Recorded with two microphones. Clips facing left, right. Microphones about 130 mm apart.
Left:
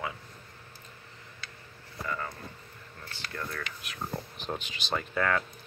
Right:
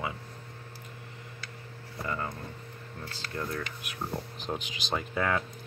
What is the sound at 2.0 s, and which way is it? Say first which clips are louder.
Speech: right 1 dB; 20° right (ahead or behind).